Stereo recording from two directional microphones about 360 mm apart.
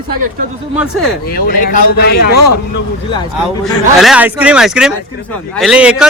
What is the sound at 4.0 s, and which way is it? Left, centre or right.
Speech, centre.